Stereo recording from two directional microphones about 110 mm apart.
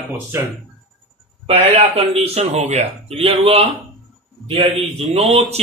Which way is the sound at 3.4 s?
60° right (ahead or behind).